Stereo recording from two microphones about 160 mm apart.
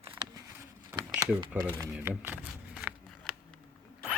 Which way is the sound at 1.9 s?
10° right (ahead or behind).